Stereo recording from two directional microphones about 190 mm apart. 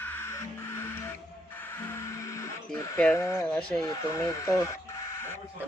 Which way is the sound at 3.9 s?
20° left (ahead or behind).